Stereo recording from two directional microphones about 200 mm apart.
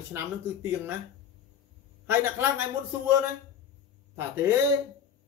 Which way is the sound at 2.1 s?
10° right (ahead or behind).